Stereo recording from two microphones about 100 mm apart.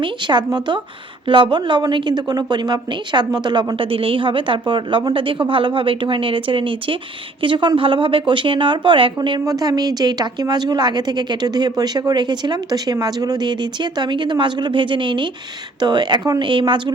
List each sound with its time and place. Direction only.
0.0 s a woman's voice: 50° right (ahead or behind)
9.5 s a woman's voice: 40° right (ahead or behind)